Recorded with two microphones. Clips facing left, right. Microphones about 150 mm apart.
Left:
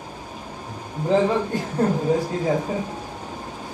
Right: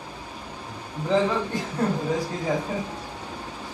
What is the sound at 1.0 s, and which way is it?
Speech, 35° left (ahead or behind).